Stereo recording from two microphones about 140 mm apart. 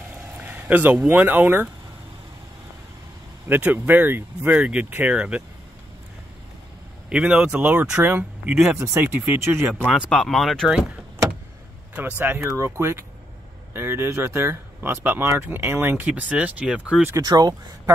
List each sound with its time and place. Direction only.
0.4 s speech: 10° right (ahead or behind)
3.4 s speech: 15° right (ahead or behind)
7.1 s speech: 10° right (ahead or behind)
9.8 s speech: centre (ahead or behind)
12.2 s speech: 15° right (ahead or behind)
17.1 s speech: 25° right (ahead or behind)